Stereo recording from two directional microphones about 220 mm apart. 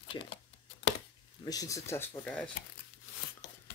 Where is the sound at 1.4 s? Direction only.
15° left (ahead or behind).